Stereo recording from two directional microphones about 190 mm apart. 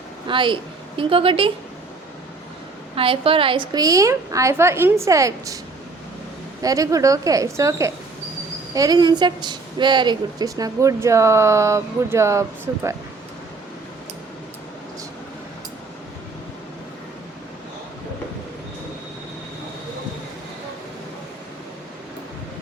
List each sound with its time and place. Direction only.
0.3 s a woman's voice: 25° right (ahead or behind)
2.9 s a woman's voice: 30° right (ahead or behind)
6.6 s a woman's voice: 20° right (ahead or behind)